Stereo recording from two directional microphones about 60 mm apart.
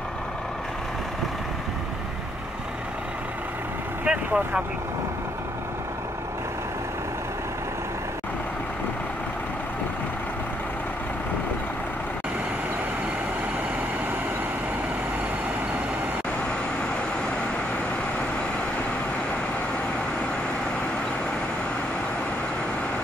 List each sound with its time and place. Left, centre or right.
4.0 s vehicle: centre